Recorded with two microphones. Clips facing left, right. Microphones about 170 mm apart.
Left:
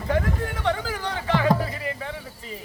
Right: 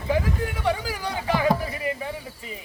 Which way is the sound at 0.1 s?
5° right (ahead or behind).